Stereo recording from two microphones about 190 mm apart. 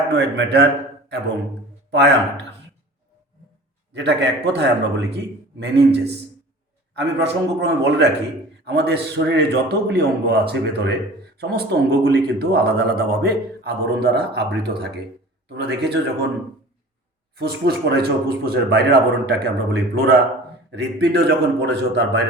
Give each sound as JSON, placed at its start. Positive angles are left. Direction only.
{"t": 0.2, "sound": "speech", "side_deg": -65}
{"t": 3.9, "sound": "speech", "side_deg": -65}
{"t": 17.3, "sound": "speech", "side_deg": -55}